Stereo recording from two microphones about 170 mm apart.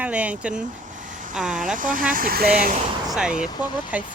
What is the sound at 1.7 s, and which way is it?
Speech, 55° right (ahead or behind).